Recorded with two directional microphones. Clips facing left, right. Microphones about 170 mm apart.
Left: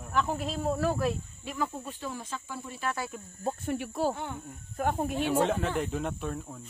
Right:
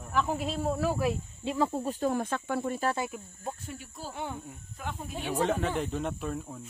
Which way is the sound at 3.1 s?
5° right (ahead or behind).